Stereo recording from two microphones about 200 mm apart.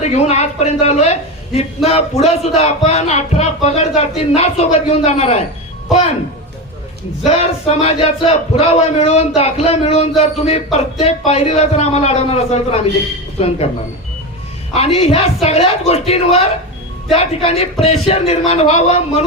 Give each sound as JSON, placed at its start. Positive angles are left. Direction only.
{"t": 0.0, "sound": "a woman's voice", "side_deg": 35}
{"t": 7.3, "sound": "a woman's voice", "side_deg": 30}
{"t": 14.7, "sound": "a woman's voice", "side_deg": 30}